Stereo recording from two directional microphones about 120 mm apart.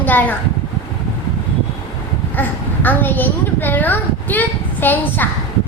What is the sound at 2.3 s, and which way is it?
A woman's voice, 15° left (ahead or behind).